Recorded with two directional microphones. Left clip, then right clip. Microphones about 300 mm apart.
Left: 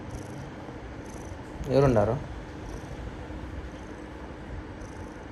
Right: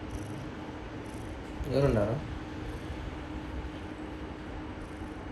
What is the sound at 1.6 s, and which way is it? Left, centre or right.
Speech, left.